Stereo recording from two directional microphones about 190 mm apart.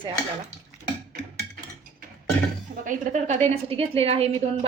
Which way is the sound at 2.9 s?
40° right (ahead or behind).